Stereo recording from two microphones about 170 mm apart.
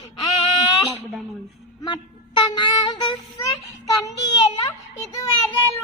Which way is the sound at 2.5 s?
25° left (ahead or behind).